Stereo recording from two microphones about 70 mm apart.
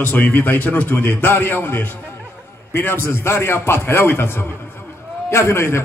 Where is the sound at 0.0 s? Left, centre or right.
Left.